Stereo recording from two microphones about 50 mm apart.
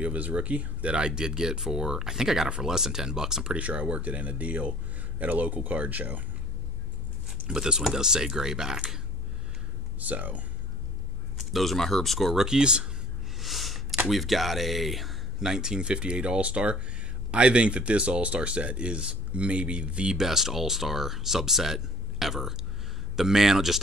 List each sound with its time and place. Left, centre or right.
0.0 s speech: right; by 3.5 s centre
3.5 s speech: right
7.4 s speech: centre
9.9 s speech: right
11.3 s speech: centre
12.4 s speech: centre
13.4 s a sound: centre
14.0 s speech: centre
15.4 s speech: centre
20.2 s speech: centre